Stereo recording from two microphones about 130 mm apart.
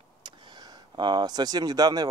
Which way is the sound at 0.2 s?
35° right (ahead or behind).